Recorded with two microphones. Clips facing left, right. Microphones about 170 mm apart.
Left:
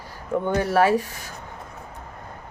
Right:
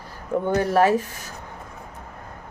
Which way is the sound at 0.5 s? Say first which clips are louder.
Right 1 dB; 40° right (ahead or behind).